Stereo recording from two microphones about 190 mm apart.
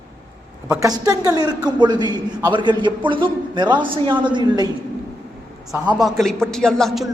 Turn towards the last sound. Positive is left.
turn(degrees=0)  # may be behind; listen again after turning